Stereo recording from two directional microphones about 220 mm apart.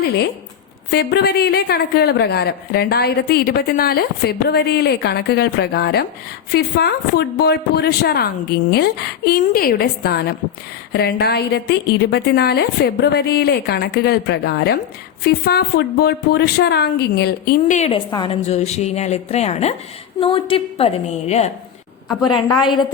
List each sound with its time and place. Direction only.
0.9 s a woman's voice: 50° left (ahead or behind); by 21.5 s 30° left (ahead or behind)